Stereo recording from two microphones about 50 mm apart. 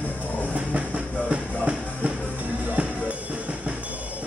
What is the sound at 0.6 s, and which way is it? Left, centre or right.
Music, right.